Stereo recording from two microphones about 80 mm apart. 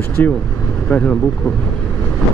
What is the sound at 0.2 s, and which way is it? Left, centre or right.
Speech, left.